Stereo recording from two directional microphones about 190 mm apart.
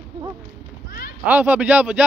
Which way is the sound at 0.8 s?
50° left (ahead or behind).